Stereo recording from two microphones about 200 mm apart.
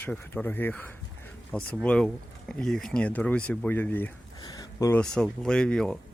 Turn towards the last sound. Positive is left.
turn(degrees=5)  # may be behind; listen again after turning